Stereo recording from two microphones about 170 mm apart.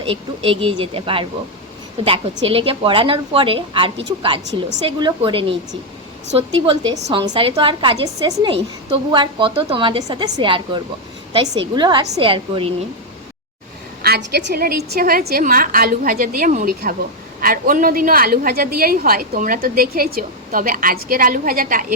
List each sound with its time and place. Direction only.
0.0 s a woman's voice: 30° right (ahead or behind)
14.0 s a woman's voice: 70° right (ahead or behind); by 21.9 s 55° right (ahead or behind)